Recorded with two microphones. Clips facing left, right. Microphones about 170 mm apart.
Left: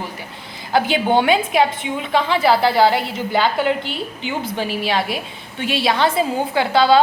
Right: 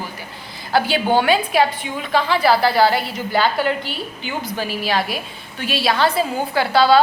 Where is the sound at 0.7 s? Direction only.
20° left (ahead or behind).